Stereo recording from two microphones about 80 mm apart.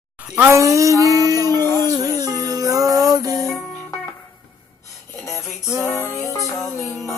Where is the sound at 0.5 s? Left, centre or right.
Right.